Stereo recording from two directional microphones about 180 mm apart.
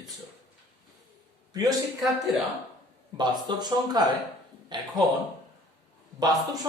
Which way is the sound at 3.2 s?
25° right (ahead or behind).